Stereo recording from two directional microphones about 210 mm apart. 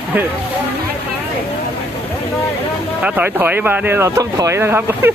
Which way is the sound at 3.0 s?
10° right (ahead or behind).